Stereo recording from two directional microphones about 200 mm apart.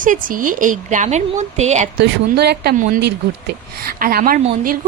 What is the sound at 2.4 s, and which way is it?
A woman's voice, 55° right (ahead or behind).